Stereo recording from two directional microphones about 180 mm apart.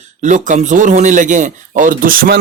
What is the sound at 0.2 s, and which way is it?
Speech, 45° right (ahead or behind).